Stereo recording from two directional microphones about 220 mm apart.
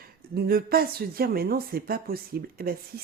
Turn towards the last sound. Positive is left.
turn(degrees=-45)  # may be behind; listen again after turning